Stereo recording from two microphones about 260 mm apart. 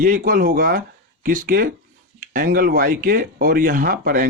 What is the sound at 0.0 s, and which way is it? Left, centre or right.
Speech, right.